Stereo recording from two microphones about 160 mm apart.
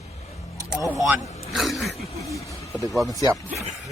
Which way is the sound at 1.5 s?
Centre (ahead or behind).